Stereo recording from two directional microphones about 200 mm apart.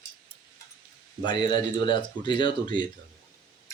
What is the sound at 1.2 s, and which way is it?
Speech, 20° left (ahead or behind).